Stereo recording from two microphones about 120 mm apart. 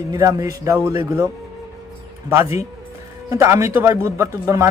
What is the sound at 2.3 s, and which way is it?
Speech, 25° right (ahead or behind).